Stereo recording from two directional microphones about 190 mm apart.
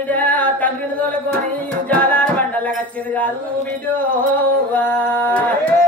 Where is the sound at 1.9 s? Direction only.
10° left (ahead or behind).